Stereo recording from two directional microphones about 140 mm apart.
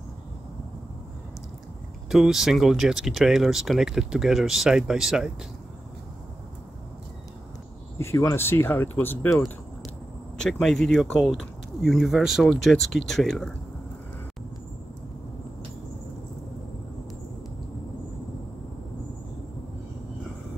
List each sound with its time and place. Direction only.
2.0 s speech: centre (ahead or behind)
8.0 s speech: 20° left (ahead or behind)
10.3 s speech: 5° left (ahead or behind)